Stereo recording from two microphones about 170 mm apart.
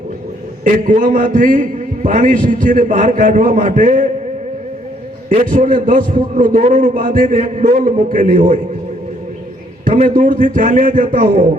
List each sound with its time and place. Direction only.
0.6 s a man's voice: 50° right (ahead or behind)
5.3 s a man's voice: 50° right (ahead or behind)
10.1 s a man's voice: 55° right (ahead or behind)